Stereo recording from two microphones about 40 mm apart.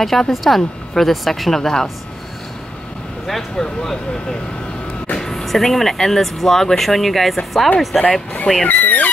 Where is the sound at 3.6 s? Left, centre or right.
Left.